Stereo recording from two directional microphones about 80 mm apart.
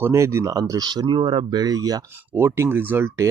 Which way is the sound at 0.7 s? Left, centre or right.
Right.